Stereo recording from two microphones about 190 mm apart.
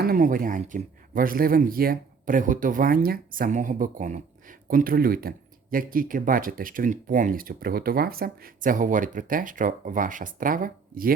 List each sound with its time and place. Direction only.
0.0 s speech: 50° right (ahead or behind)